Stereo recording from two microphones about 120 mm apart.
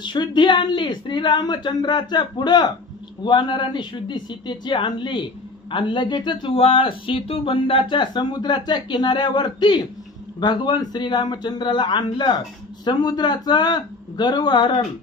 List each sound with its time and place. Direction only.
0.0 s a woman's voice: 40° left (ahead or behind)